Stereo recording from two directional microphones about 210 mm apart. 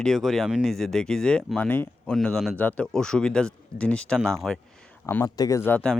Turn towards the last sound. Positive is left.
turn(degrees=5)  # may be behind; listen again after turning